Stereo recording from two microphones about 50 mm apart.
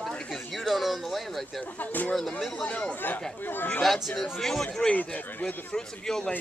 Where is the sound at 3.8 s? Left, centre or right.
Centre.